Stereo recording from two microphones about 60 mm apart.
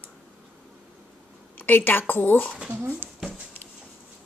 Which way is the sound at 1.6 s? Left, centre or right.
Left.